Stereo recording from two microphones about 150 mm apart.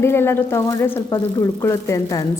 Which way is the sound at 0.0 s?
15° left (ahead or behind).